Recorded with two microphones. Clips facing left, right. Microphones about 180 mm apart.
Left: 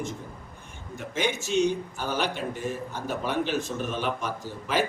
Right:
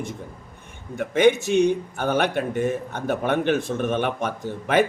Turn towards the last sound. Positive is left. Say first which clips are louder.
# right 7 dB
turn(degrees=-60)  # may be behind; listen again after turning